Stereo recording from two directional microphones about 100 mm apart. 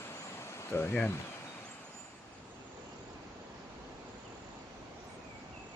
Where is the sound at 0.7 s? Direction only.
25° left (ahead or behind).